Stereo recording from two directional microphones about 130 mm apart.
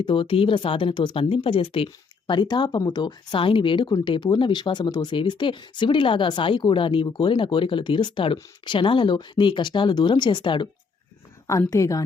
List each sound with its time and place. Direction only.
0.0 s speech: 40° left (ahead or behind)
11.7 s a woman's voice: 25° left (ahead or behind)